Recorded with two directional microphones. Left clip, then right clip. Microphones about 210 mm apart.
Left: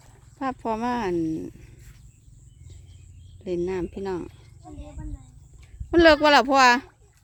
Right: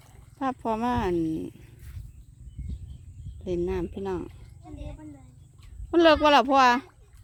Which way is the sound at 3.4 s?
5° left (ahead or behind).